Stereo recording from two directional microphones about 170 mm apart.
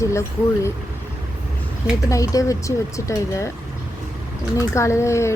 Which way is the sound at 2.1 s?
20° left (ahead or behind).